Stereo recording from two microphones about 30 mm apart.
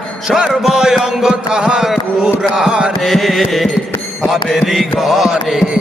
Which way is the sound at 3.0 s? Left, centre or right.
Centre.